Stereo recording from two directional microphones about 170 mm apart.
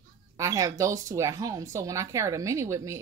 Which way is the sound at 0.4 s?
20° right (ahead or behind).